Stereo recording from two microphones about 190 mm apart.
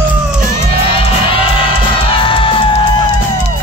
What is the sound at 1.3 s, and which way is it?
Music, 30° left (ahead or behind).